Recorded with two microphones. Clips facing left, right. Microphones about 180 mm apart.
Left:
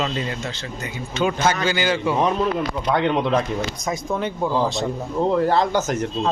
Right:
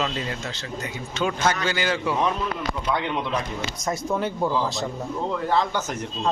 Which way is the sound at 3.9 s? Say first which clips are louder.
Right 1 dB; centre (ahead or behind).